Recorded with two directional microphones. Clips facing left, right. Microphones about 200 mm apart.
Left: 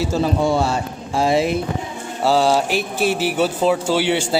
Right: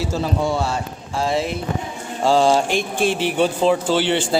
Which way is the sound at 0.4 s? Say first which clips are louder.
Left 3 dB; 30° left (ahead or behind).